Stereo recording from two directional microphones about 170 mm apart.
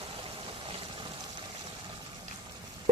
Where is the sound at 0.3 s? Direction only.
30° right (ahead or behind).